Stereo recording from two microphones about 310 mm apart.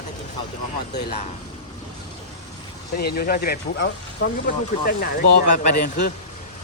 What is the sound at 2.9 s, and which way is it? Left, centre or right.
Speech, left.